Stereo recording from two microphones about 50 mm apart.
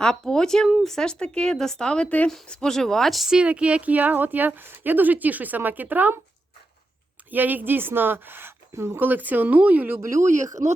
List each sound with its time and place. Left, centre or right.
0.0 s speech: centre
2.0 s speech: left
2.5 s speech: centre
3.4 s speech: right
7.3 s a woman's voice: right
8.7 s speech: right
9.0 s speech: right
10.0 s speech: right